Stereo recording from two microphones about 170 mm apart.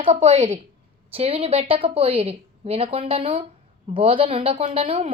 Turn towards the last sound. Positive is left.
turn(degrees=-35)  # may be behind; listen again after turning